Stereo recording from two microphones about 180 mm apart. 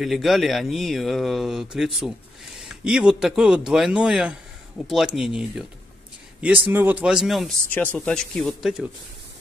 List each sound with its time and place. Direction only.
0.0 s speech: centre (ahead or behind)